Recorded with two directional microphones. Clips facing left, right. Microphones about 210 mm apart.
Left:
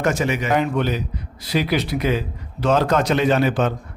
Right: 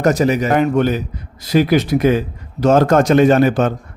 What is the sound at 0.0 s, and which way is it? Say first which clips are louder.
A man's voice: right 6 dB; 40° right (ahead or behind).